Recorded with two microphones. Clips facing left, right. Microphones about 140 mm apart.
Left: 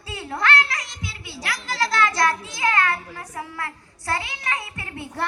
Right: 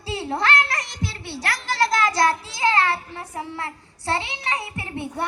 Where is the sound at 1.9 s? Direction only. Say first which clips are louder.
Even; 40° right (ahead or behind).